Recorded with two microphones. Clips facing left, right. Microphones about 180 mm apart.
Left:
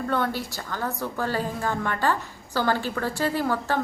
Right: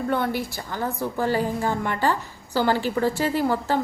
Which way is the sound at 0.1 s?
15° right (ahead or behind).